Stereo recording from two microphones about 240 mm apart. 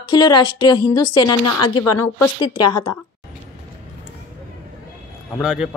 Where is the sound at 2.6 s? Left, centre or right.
Left.